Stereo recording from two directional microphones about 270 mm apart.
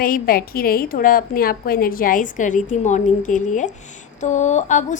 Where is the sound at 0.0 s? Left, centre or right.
Left.